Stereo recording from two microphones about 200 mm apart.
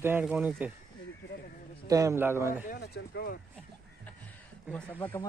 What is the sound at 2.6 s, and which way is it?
Speech, 55° left (ahead or behind).